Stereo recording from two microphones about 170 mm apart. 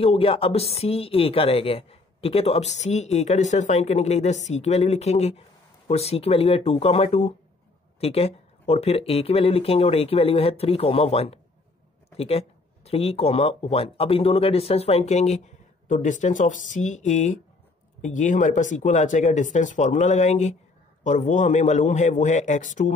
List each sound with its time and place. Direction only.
0.0 s a woman's voice: 35° left (ahead or behind)